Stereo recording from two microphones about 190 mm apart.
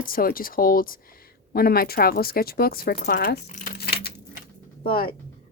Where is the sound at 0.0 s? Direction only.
50° left (ahead or behind).